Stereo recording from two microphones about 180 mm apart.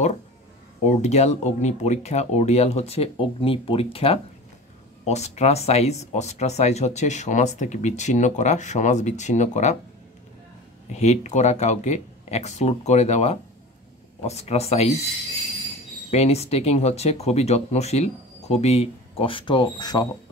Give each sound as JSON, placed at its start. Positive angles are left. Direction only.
{"t": 0.8, "sound": "speech", "side_deg": 40}
{"t": 10.9, "sound": "speech", "side_deg": 40}
{"t": 16.1, "sound": "speech", "side_deg": 35}